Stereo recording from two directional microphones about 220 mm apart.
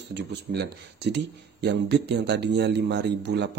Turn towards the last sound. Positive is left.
turn(degrees=-50)  # may be behind; listen again after turning